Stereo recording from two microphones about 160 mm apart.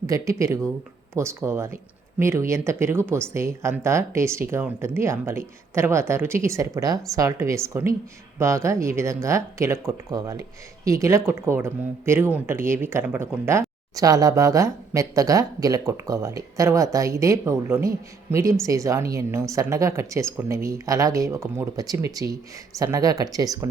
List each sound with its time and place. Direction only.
0.1 s speech: 20° right (ahead or behind)